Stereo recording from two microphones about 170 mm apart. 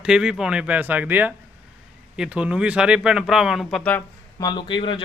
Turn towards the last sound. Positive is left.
turn(degrees=30)  # may be behind; listen again after turning